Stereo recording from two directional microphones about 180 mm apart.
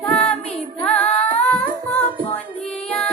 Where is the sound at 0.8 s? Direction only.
5° left (ahead or behind).